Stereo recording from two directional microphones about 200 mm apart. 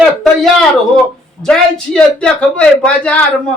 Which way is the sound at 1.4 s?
5° left (ahead or behind).